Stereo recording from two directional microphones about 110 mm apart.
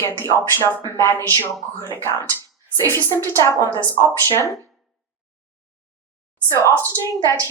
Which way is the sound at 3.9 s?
25° left (ahead or behind).